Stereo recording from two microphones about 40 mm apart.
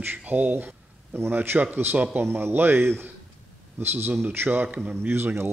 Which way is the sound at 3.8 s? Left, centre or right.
Right.